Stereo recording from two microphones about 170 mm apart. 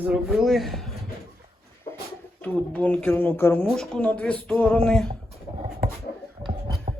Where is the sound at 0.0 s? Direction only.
5° right (ahead or behind).